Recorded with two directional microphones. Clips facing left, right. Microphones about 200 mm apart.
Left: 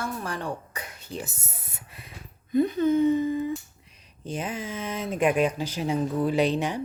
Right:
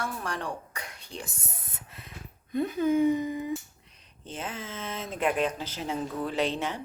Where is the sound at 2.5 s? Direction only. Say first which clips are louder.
Left 4 dB; centre (ahead or behind).